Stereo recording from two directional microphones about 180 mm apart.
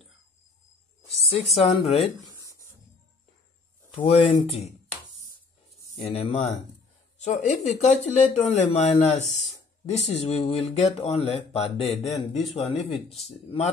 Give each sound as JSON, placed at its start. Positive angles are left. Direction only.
{"t": 1.3, "sound": "speech", "side_deg": 35}
{"t": 3.9, "sound": "speech", "side_deg": 30}
{"t": 4.3, "sound": "speech", "side_deg": 40}
{"t": 6.1, "sound": "speech", "side_deg": 35}